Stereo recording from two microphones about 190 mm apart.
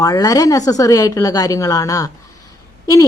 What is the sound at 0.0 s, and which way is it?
A woman's voice, 20° left (ahead or behind).